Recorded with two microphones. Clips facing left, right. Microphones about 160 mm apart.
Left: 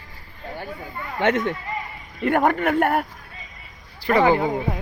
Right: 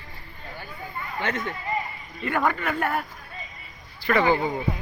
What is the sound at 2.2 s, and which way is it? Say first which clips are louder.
Speech: left 6 dB; 60° left (ahead or behind).